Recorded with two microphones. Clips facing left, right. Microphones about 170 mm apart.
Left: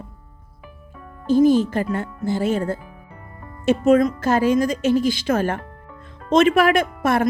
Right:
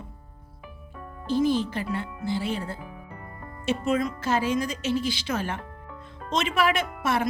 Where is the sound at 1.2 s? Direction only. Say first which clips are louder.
Left 8 dB; 45° left (ahead or behind).